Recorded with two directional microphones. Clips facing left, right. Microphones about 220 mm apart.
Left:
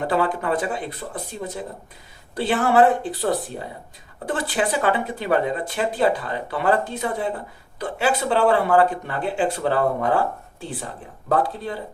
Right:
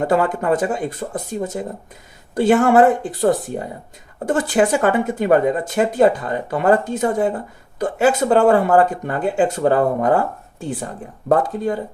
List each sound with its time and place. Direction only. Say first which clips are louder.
0.1 s speech: right 3 dB; 45° right (ahead or behind)